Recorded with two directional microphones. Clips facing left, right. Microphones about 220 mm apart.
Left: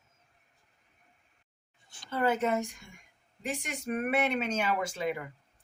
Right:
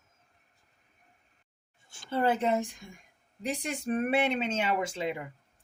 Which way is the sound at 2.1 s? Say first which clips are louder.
Right 1 dB; 30° right (ahead or behind).